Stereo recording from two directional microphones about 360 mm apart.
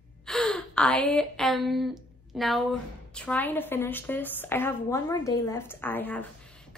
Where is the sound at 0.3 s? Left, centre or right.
Centre.